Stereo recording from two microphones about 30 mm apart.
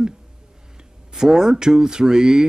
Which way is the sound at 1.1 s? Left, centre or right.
Centre.